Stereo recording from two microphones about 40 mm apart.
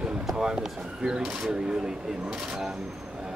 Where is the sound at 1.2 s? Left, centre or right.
Centre.